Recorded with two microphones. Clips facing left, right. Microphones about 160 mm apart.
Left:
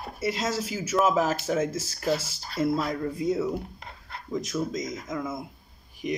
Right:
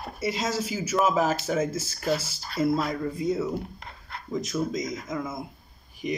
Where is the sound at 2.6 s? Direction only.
10° right (ahead or behind).